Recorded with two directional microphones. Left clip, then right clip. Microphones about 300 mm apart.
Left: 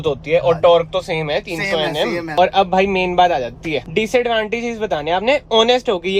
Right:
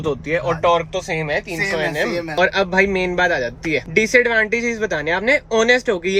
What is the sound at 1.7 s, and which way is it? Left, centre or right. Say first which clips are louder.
Speech: left 4 dB; left.